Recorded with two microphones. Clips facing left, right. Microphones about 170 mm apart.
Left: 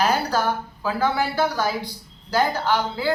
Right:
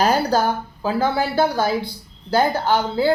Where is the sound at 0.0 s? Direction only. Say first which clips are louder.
Right 4 dB; 30° right (ahead or behind).